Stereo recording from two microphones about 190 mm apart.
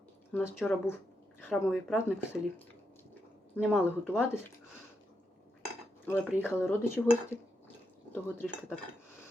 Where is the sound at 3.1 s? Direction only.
10° left (ahead or behind).